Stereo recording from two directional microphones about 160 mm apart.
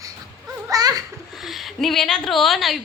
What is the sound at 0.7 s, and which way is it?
Speech, 25° right (ahead or behind).